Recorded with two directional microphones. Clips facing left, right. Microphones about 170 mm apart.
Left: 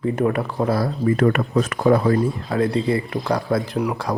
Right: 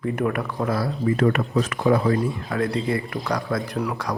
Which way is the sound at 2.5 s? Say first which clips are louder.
Left 4 dB; 25° left (ahead or behind).